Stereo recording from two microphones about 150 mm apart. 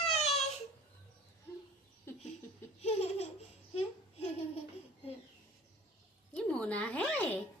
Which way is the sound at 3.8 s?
40° left (ahead or behind).